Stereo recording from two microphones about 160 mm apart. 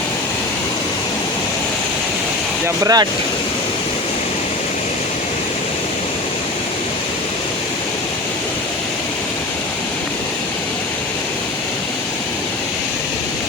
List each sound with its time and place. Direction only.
2.8 s speech: 25° right (ahead or behind)